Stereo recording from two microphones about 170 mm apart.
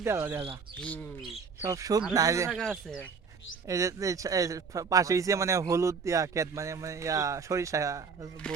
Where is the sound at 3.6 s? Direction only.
20° right (ahead or behind).